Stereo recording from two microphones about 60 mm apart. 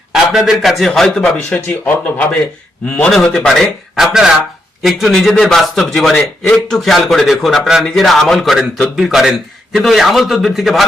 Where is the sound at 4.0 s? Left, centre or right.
Centre.